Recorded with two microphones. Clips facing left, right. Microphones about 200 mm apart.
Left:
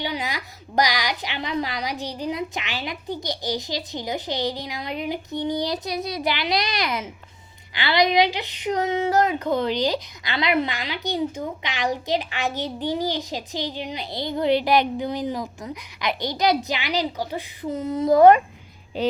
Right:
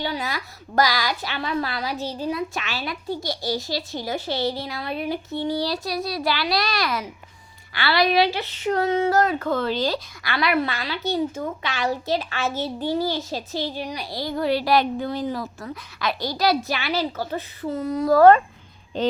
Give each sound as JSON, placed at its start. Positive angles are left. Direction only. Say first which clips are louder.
{"t": 0.0, "sound": "speech", "louder": "right 1 dB", "side_deg": 15}